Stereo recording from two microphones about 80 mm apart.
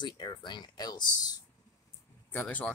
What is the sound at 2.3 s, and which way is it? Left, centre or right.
Speech, left.